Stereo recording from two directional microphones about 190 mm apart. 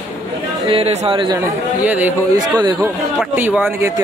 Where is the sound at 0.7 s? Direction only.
35° right (ahead or behind).